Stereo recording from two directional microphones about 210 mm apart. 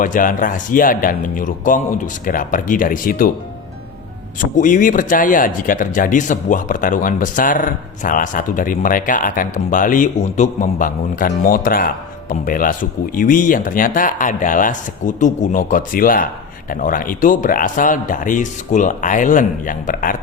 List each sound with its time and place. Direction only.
0.0 s speech: 40° left (ahead or behind)
4.4 s speech: 40° left (ahead or behind)